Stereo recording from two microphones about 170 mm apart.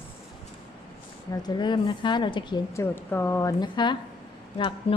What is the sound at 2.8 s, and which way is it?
A woman's voice, 15° left (ahead or behind).